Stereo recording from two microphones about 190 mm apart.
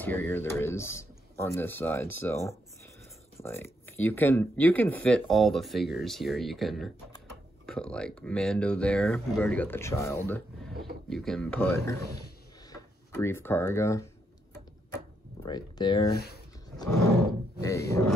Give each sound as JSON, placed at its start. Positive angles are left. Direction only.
{"t": 0.0, "sound": "speech", "side_deg": 10}
{"t": 15.4, "sound": "speech", "side_deg": 25}
{"t": 17.6, "sound": "speech", "side_deg": 15}